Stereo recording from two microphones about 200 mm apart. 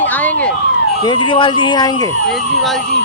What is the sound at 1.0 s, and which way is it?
Speech, 25° left (ahead or behind).